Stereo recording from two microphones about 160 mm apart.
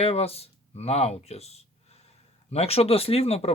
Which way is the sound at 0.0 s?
40° left (ahead or behind).